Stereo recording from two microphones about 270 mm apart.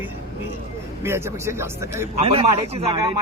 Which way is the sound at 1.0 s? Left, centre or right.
Centre.